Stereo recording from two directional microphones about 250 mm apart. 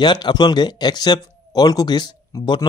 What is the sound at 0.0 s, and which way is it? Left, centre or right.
Speech, centre.